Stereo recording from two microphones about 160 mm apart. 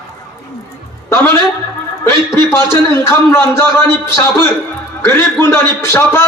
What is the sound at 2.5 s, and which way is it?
A man's voice, 15° left (ahead or behind).